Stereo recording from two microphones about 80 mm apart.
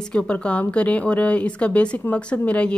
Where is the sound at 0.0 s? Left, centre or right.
Centre.